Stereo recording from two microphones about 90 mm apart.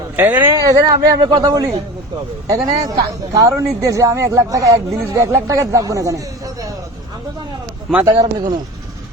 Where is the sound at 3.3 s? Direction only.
35° right (ahead or behind).